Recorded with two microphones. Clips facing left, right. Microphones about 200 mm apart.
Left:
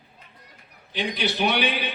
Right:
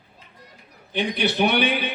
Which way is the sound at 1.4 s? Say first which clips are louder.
Right 3 dB; 55° right (ahead or behind).